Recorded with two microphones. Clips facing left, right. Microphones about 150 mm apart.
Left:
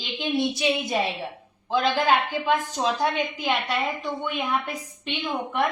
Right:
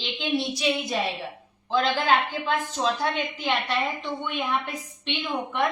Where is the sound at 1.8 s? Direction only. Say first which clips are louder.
Left 1 dB; 10° left (ahead or behind).